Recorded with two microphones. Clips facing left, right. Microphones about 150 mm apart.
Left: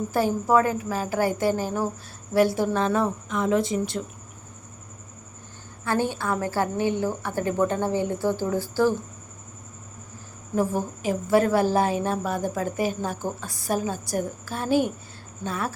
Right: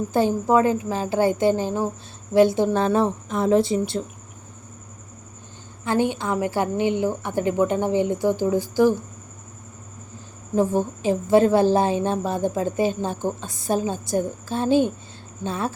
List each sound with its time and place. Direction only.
0.1 s a woman's voice: 25° right (ahead or behind)
5.8 s a woman's voice: 20° right (ahead or behind)
10.5 s a woman's voice: 20° right (ahead or behind)